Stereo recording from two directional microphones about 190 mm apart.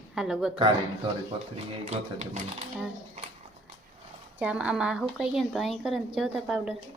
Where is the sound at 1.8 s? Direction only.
35° right (ahead or behind).